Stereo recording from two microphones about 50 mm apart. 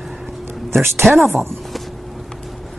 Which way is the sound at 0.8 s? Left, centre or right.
Right.